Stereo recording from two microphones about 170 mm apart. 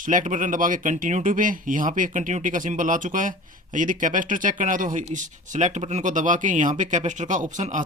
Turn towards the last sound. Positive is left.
turn(degrees=-45)  # may be behind; listen again after turning